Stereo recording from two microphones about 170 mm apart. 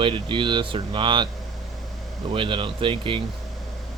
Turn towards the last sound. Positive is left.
turn(degrees=-30)  # may be behind; listen again after turning